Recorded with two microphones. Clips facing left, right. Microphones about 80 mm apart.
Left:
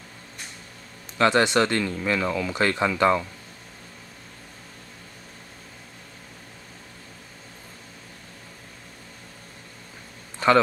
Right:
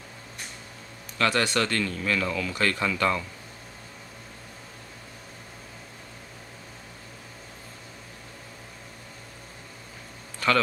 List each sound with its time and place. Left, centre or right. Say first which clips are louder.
1.1 s speech: left 5 dB; left